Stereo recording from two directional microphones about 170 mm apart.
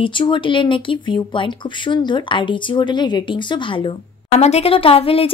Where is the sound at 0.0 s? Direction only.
30° left (ahead or behind).